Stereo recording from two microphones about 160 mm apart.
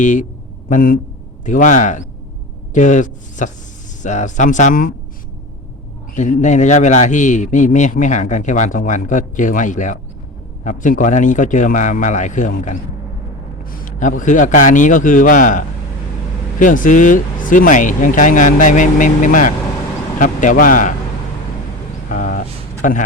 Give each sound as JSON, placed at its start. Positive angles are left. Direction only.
{"t": 0.0, "sound": "a man's voice", "side_deg": 50}
{"t": 6.1, "sound": "a man's voice", "side_deg": 50}
{"t": 22.1, "sound": "vehicle", "side_deg": 55}
{"t": 22.8, "sound": "speech", "side_deg": 55}